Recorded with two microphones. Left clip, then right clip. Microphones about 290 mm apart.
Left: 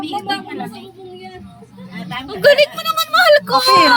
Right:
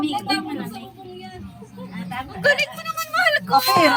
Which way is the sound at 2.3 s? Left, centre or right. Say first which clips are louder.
Left 8 dB; left.